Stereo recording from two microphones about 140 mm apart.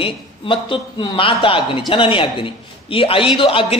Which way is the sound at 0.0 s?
35° left (ahead or behind).